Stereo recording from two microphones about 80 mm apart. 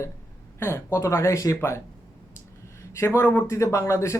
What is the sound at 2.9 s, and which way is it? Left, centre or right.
Speech, left.